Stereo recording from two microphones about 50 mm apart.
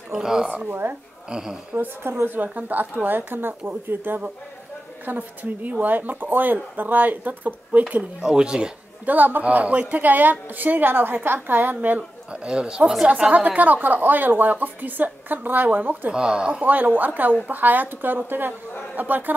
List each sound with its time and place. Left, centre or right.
0.1 s speech: centre
0.7 s speech: right
1.3 s speech: centre
2.2 s speech: right
5.0 s speech: right
8.0 s speech: centre
9.0 s speech: right
12.3 s speech: centre
13.3 s speech: right
16.1 s speech: centre
16.6 s speech: right